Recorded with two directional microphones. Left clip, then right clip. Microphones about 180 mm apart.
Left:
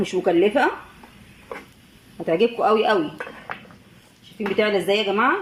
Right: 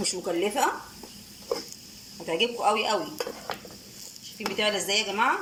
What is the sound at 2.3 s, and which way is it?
Speech, 30° left (ahead or behind).